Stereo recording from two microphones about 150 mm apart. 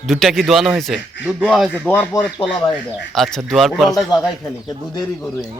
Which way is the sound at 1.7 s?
10° left (ahead or behind).